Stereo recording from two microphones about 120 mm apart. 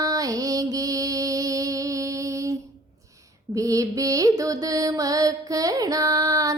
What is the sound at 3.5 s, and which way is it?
Mantra, 25° right (ahead or behind).